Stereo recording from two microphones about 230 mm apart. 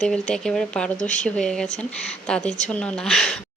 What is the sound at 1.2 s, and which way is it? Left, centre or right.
Speech, centre.